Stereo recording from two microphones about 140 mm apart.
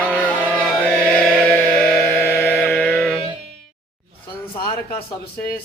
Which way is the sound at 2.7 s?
5° left (ahead or behind).